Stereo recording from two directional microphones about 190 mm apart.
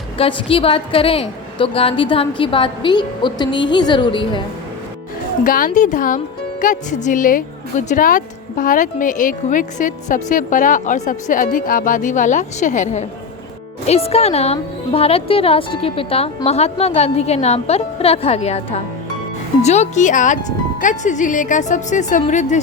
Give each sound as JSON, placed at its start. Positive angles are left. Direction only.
{"t": 0.2, "sound": "a woman's voice", "side_deg": 30}
{"t": 5.4, "sound": "a woman's voice", "side_deg": 45}